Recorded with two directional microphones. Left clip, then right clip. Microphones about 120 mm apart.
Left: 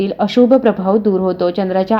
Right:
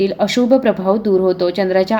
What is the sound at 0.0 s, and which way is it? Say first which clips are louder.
Speech: left 2 dB; 25° left (ahead or behind).